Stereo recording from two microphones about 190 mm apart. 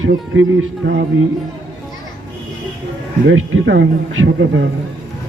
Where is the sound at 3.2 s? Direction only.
80° right.